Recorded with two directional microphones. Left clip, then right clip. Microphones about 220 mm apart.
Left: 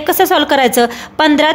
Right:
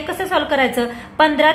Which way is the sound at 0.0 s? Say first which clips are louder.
Left 8 dB; 55° left (ahead or behind).